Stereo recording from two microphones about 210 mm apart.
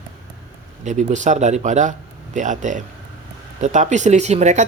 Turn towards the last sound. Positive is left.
turn(degrees=-35)  # may be behind; listen again after turning